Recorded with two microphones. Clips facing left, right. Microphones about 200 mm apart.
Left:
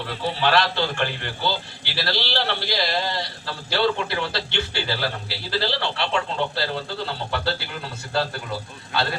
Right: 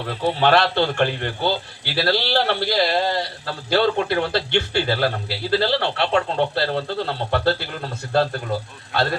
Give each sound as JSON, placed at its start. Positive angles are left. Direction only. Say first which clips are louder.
{"t": 0.3, "sound": "a man's voice", "louder": "right 4 dB", "side_deg": -50}